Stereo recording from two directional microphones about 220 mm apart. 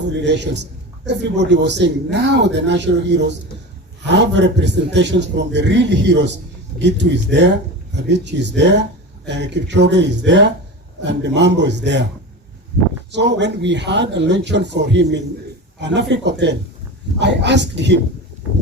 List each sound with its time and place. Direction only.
0.1 s a man's voice: 50° right (ahead or behind)
13.1 s a man's voice: 50° right (ahead or behind)